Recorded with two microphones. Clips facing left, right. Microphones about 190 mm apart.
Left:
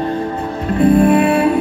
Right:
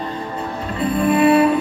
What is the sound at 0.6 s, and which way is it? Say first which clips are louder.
Music: left 8 dB; 50° left (ahead or behind).